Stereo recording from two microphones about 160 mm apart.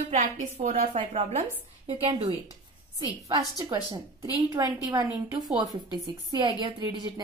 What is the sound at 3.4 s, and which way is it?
A woman's voice, 25° right (ahead or behind).